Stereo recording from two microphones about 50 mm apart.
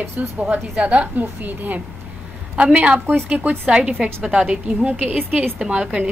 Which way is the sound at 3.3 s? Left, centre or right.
Right.